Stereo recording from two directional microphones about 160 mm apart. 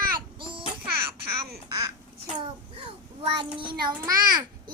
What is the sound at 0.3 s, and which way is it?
Babbling, 30° right (ahead or behind).